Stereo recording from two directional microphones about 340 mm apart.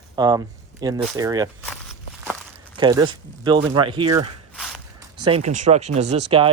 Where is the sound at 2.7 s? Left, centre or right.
Centre.